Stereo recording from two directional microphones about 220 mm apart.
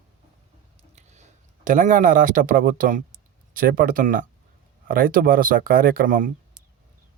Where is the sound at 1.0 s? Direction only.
30° right (ahead or behind).